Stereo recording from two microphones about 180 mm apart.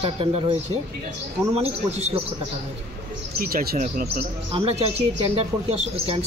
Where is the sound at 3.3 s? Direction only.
55° right (ahead or behind).